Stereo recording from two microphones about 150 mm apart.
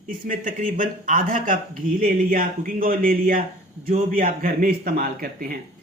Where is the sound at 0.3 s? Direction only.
65° right (ahead or behind).